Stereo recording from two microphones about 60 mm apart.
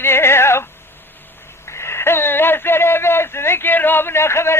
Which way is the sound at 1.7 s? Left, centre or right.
Left.